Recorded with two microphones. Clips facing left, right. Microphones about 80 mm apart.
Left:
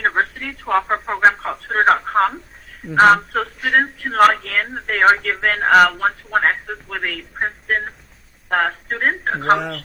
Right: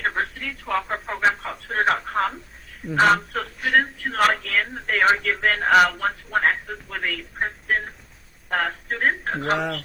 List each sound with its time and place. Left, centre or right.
0.0 s telephone: left
2.9 s speech: left
5.9 s telephone: left
8.4 s speech: left